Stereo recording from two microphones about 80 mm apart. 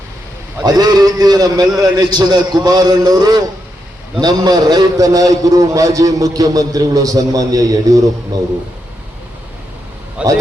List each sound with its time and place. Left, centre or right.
0.6 s a man's voice: right
10.2 s speech: centre